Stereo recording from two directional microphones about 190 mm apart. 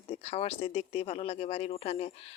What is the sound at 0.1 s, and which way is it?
Speech, 35° left (ahead or behind).